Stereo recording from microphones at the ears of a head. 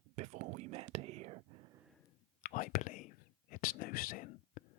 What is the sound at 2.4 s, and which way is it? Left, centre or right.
Whispering, left.